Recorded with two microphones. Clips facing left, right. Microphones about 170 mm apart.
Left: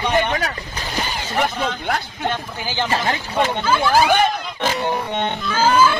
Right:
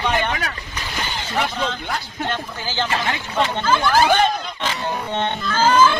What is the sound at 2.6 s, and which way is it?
Speech, 15° left (ahead or behind).